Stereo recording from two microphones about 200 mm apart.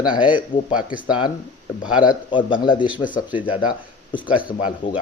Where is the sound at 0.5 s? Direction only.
40° left (ahead or behind).